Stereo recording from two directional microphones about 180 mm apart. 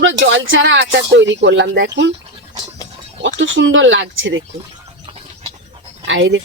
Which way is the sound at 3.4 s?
90° right.